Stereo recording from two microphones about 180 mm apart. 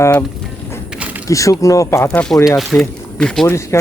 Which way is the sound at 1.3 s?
20° left (ahead or behind).